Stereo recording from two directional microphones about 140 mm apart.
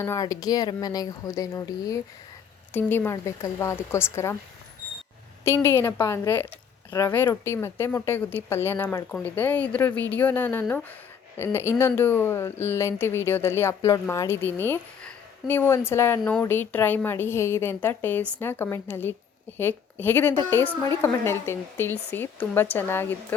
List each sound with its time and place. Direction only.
0.0 s speech: 20° left (ahead or behind)
5.5 s speech: 15° left (ahead or behind)